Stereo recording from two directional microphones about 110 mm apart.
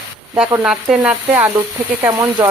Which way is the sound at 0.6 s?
10° right (ahead or behind).